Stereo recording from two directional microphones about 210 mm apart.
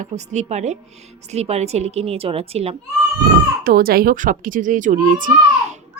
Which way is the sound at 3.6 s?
45° right (ahead or behind).